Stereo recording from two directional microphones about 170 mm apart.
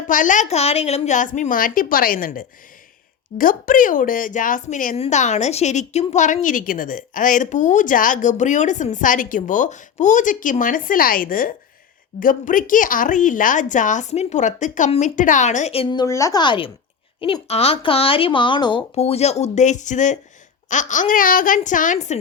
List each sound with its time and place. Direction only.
0.1 s a woman's voice: 50° left (ahead or behind)
4.9 s a woman's voice: 40° left (ahead or behind)